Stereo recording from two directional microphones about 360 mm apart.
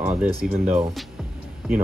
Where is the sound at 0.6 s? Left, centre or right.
Centre.